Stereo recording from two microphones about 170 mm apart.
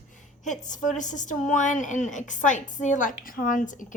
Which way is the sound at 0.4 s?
45° left (ahead or behind).